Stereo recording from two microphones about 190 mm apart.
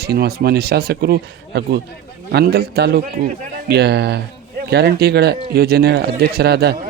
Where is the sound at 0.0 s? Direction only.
55° right (ahead or behind).